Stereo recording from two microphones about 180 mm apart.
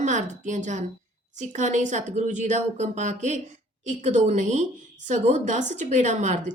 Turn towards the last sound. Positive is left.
turn(degrees=-40)  # may be behind; listen again after turning